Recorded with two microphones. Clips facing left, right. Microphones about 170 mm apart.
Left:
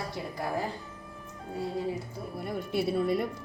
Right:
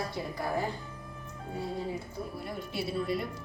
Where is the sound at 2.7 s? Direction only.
50° left (ahead or behind).